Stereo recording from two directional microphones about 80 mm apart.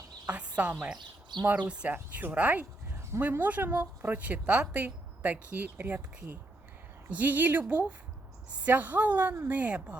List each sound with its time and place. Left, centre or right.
0.3 s speech: centre
0.9 s speech: right
1.5 s speech: centre
9.6 s speech: centre